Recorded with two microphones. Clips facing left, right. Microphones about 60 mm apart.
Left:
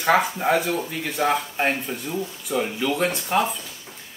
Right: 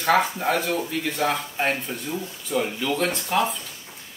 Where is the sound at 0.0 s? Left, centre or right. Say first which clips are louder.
Left 1 dB; centre.